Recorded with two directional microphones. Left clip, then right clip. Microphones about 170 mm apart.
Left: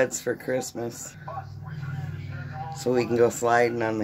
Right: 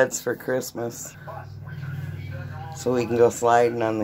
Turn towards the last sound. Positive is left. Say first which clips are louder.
# right 3 dB
turn(degrees=0)  # may be behind; listen again after turning